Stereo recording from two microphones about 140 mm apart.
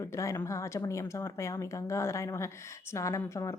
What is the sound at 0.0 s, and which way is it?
Speech, 20° left (ahead or behind).